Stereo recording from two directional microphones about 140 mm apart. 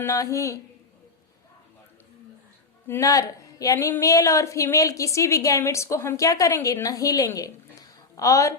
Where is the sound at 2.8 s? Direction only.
20° left (ahead or behind).